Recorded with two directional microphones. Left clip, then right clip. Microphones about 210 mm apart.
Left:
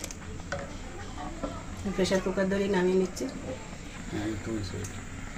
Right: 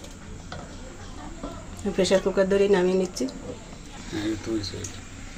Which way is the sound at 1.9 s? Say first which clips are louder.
Right 6 dB; 55° right (ahead or behind).